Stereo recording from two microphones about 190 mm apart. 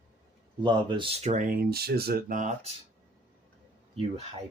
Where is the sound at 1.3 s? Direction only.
45° right (ahead or behind).